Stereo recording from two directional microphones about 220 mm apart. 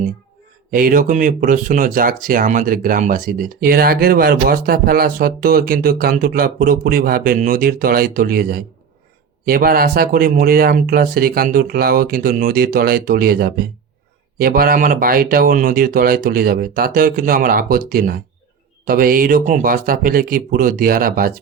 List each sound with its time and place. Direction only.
0.7 s speech: 40° right (ahead or behind)